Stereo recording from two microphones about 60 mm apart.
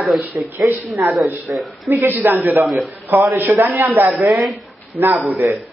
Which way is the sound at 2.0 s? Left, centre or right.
Right.